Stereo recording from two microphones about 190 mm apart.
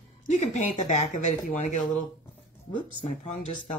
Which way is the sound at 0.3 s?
40° left (ahead or behind).